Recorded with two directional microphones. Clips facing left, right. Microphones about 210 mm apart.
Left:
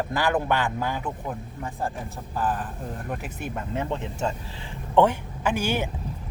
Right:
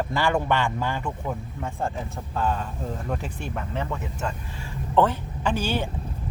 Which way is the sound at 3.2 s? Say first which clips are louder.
Even; 20° left (ahead or behind).